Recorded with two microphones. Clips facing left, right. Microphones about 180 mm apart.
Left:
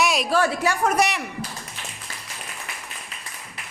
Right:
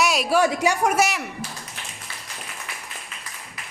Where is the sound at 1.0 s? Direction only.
Centre (ahead or behind).